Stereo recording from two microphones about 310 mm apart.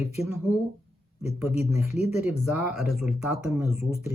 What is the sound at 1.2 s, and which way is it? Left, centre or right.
Speech, centre.